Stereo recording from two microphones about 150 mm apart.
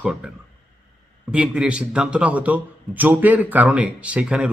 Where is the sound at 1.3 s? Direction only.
5° right (ahead or behind).